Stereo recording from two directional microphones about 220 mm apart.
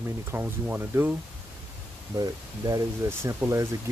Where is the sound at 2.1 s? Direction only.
15° right (ahead or behind).